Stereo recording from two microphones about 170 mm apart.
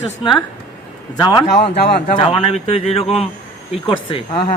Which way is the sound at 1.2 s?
25° left (ahead or behind).